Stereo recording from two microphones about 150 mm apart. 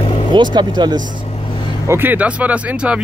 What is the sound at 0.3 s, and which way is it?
Speech, 30° right (ahead or behind).